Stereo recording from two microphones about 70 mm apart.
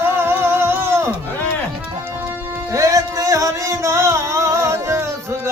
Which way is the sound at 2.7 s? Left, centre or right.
Right.